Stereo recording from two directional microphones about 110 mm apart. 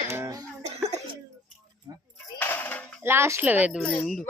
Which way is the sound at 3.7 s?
10° left (ahead or behind).